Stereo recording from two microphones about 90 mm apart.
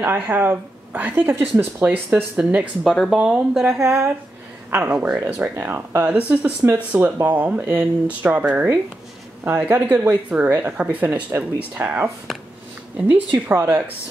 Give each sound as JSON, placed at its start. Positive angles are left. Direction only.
{"t": 0.0, "sound": "speech", "side_deg": -25}
{"t": 2.3, "sound": "speech", "side_deg": -15}
{"t": 2.8, "sound": "speech", "side_deg": 0}
{"t": 3.8, "sound": "speech", "side_deg": -30}
{"t": 4.9, "sound": "speech", "side_deg": -10}
{"t": 12.3, "sound": "a sound", "side_deg": 0}
{"t": 12.9, "sound": "speech", "side_deg": -20}